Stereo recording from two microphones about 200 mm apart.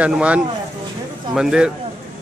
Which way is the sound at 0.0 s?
5° right (ahead or behind).